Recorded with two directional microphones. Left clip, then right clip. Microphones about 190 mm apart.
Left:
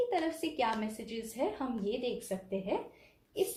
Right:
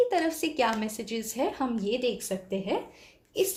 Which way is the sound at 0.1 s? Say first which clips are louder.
Right 6 dB; 50° right (ahead or behind).